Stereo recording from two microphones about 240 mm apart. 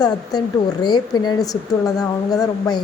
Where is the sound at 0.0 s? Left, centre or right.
Centre.